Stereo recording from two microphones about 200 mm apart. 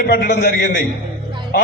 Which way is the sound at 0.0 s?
50° left (ahead or behind).